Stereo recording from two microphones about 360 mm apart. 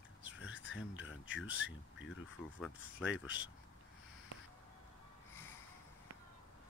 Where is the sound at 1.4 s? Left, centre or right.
Centre.